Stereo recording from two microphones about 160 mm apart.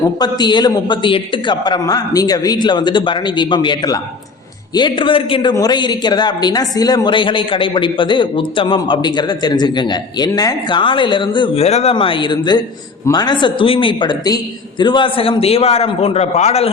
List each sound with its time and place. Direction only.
0.2 s a man's voice: 25° left (ahead or behind); by 16.6 s 40° left (ahead or behind)